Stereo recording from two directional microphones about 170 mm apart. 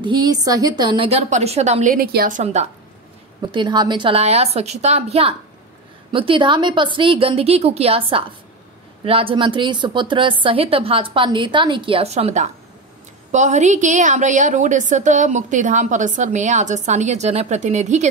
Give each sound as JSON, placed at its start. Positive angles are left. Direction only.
{"t": 0.0, "sound": "a woman's voice", "side_deg": -25}
{"t": 3.5, "sound": "a woman's voice", "side_deg": -25}